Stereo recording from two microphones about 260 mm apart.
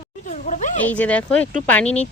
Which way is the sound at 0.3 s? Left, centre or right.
Left.